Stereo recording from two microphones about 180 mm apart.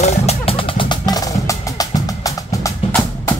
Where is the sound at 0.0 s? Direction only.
35° left (ahead or behind); by 2.7 s 20° left (ahead or behind).